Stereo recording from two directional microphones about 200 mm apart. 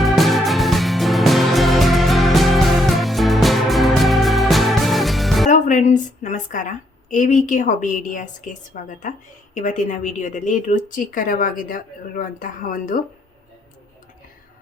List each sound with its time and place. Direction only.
0.0 s music: centre (ahead or behind)
5.5 s a woman's voice: 40° left (ahead or behind)